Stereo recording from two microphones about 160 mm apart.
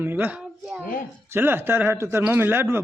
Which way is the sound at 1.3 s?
15° right (ahead or behind).